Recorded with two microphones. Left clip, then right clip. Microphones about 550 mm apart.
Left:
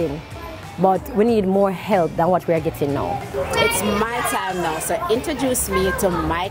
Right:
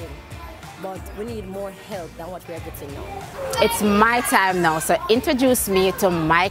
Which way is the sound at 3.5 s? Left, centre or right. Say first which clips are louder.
Right 1 dB; right.